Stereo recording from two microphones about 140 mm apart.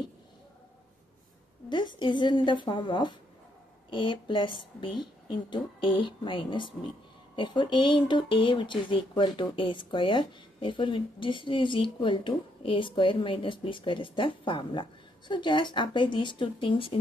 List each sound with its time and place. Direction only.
1.7 s speech: 35° left (ahead or behind)